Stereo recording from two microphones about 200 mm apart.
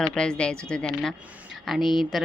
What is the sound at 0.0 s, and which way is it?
Speech, 5° left (ahead or behind).